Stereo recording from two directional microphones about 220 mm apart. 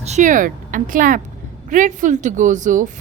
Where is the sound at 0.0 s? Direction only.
30° right (ahead or behind).